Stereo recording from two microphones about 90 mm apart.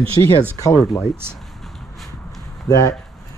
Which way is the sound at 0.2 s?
65° left (ahead or behind).